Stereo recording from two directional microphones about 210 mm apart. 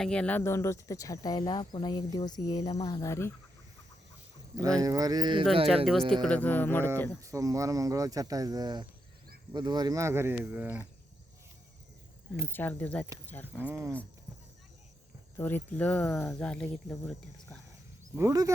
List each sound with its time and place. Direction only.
0.0 s speech: 5° left (ahead or behind)
4.8 s speech: 15° right (ahead or behind)
5.6 s speech: centre (ahead or behind)
7.2 s speech: 15° right (ahead or behind)
12.5 s speech: 10° left (ahead or behind)
13.6 s speech: 10° right (ahead or behind)
15.4 s speech: 10° left (ahead or behind)
18.1 s speech: 15° right (ahead or behind)